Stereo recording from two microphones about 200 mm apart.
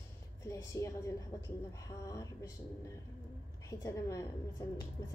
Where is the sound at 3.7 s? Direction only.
15° left (ahead or behind).